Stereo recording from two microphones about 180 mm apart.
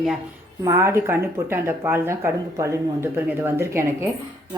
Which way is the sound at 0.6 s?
15° right (ahead or behind).